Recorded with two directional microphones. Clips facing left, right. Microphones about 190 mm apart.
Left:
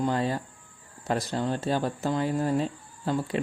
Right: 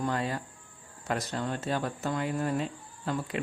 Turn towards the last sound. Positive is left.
turn(degrees=30)  # may be behind; listen again after turning